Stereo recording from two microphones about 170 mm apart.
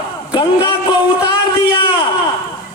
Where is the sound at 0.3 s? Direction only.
25° left (ahead or behind).